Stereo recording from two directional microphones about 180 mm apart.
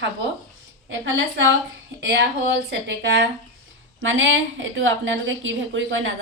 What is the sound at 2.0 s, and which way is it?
A woman's voice, 80° right.